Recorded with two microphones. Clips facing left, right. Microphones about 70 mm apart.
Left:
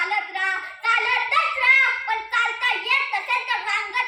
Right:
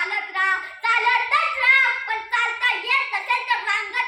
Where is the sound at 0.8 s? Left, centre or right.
Right.